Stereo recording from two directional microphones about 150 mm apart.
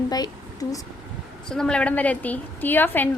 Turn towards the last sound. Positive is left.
turn(degrees=15)  # may be behind; listen again after turning